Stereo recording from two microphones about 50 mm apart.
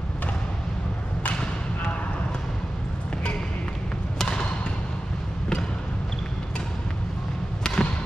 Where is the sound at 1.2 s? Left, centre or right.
Left.